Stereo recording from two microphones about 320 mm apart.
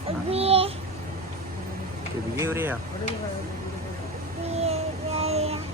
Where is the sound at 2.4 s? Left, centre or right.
Centre.